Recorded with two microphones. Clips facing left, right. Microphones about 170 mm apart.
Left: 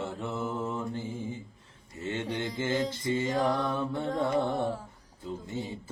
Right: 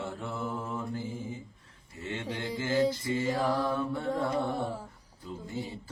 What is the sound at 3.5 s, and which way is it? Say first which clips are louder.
Mantra: even; 20° left (ahead or behind).